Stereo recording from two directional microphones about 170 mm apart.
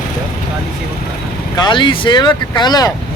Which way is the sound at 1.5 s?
25° left (ahead or behind).